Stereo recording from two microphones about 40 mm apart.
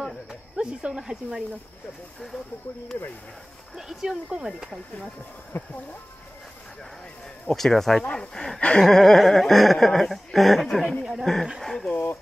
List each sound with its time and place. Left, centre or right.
0.6 s speech: right
3.7 s speech: centre
5.5 s speech: left
7.5 s speech: centre
8.5 s a sound: left
8.8 s speech: centre